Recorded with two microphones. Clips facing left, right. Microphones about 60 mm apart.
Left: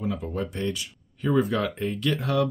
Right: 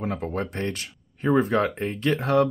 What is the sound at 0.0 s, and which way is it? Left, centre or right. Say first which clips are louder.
Speech: right 1 dB; right.